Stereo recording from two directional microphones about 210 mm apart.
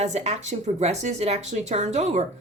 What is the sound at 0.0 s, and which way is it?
Speech, 30° right (ahead or behind).